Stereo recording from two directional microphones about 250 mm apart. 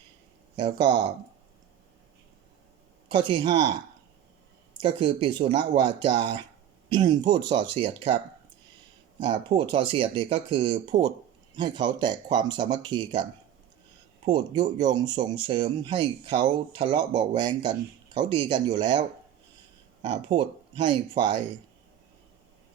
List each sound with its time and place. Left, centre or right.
0.5 s speech: centre
3.1 s speech: centre
4.8 s speech: centre
9.1 s speech: centre
14.3 s speech: centre